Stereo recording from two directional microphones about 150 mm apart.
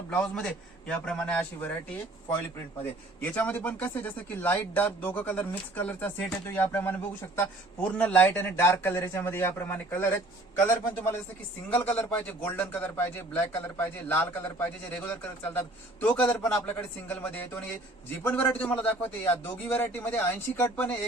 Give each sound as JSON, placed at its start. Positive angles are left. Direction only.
{"t": 0.1, "sound": "speech", "side_deg": 5}
{"t": 3.2, "sound": "speech", "side_deg": 10}